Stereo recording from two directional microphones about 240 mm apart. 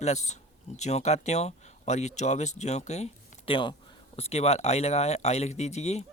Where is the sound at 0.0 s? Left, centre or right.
Left.